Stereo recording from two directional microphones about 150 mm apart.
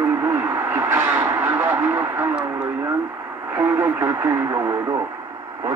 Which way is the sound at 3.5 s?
15° right (ahead or behind).